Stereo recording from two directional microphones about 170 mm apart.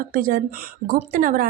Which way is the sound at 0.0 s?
55° right (ahead or behind).